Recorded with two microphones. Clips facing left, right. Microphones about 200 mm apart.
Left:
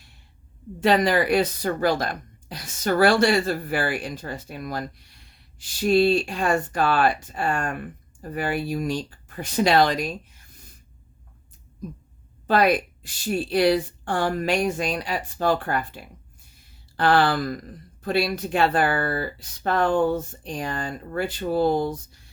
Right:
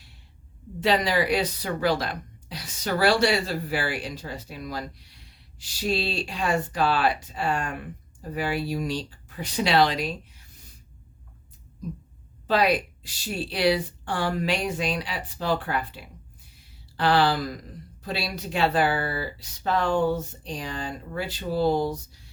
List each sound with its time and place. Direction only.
0.8 s speech: 50° left (ahead or behind)
12.5 s speech: 50° left (ahead or behind)